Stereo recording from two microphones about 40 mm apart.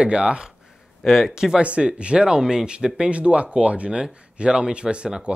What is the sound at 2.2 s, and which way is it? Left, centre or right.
Speech, centre.